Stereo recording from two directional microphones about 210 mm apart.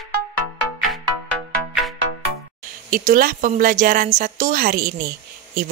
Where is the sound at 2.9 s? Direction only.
40° right (ahead or behind).